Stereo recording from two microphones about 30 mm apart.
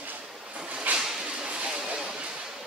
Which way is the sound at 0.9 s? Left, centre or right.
Right.